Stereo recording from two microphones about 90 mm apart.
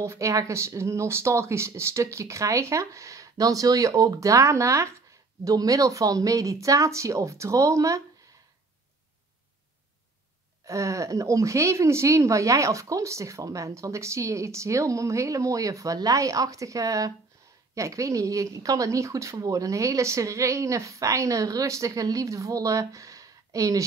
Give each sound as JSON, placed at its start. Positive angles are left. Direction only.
{"t": 0.0, "sound": "speech", "side_deg": -35}
{"t": 10.6, "sound": "speech", "side_deg": -35}